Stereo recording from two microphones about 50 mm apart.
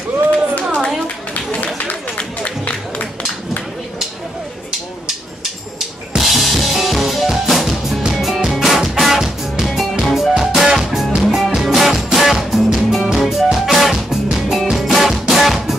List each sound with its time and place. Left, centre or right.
2.1 s music: left
5.0 s drum kit: centre
10.0 s music: centre
10.3 s music: centre